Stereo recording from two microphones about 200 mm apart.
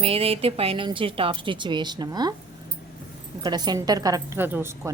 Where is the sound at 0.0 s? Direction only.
30° right (ahead or behind).